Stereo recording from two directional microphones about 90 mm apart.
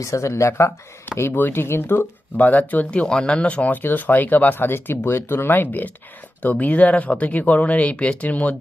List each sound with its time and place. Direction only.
0.0 s speech: 35° left (ahead or behind); by 8.5 s 15° left (ahead or behind)